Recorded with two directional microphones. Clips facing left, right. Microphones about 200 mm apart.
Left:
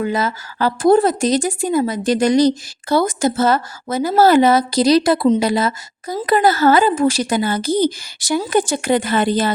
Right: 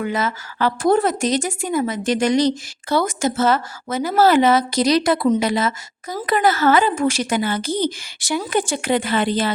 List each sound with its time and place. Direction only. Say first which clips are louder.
0.0 s a woman's voice: left 3 dB; 35° left (ahead or behind)